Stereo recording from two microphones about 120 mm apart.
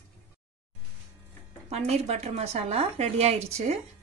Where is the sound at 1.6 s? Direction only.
60° right (ahead or behind).